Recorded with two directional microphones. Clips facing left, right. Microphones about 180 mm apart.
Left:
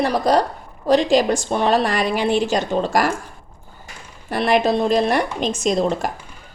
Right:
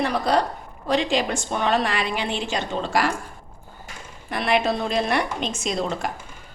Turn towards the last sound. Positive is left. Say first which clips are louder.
# left 7 dB
turn(degrees=40)  # may be behind; listen again after turning